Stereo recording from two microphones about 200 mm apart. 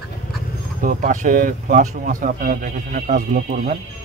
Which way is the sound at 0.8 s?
40° right (ahead or behind).